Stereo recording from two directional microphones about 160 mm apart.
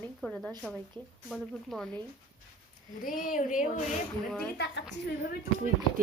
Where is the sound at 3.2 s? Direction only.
55° left (ahead or behind).